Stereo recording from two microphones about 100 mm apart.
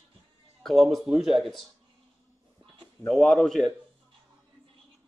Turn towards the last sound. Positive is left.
turn(degrees=0)  # may be behind; listen again after turning